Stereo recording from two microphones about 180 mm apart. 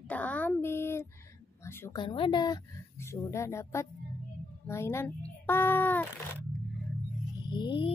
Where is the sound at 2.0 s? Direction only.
25° left (ahead or behind); by 6.0 s 10° left (ahead or behind).